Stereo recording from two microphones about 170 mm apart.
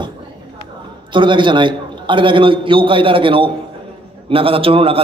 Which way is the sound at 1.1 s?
30° right (ahead or behind).